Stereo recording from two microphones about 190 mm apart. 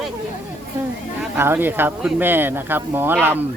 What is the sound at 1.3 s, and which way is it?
Speech, 10° right (ahead or behind).